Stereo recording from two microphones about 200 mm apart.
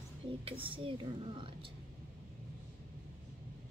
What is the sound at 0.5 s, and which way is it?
A woman's voice, 25° right (ahead or behind).